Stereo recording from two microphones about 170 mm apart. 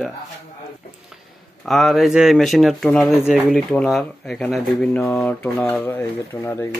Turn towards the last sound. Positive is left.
turn(degrees=15)  # may be behind; listen again after turning